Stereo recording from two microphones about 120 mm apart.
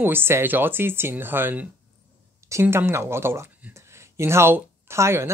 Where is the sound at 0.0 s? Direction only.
20° right (ahead or behind).